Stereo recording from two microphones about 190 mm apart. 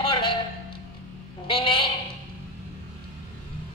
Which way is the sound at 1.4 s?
25° left (ahead or behind).